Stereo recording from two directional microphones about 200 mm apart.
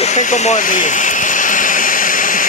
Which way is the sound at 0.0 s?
35° left (ahead or behind).